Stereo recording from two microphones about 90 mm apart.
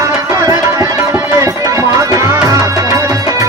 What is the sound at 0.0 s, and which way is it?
Tabla, 35° right (ahead or behind).